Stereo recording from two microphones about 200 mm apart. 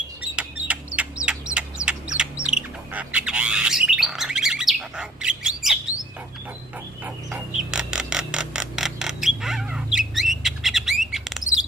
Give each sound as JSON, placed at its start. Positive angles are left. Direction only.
{"t": 0.7, "sound": "bird", "side_deg": -5}
{"t": 7.0, "sound": "a sound", "side_deg": -5}
{"t": 11.1, "sound": "bird", "side_deg": 0}